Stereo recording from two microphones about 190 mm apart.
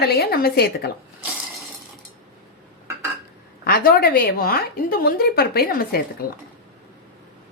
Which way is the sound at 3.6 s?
50° left (ahead or behind).